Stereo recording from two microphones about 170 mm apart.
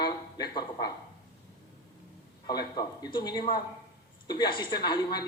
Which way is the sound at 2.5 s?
25° left (ahead or behind).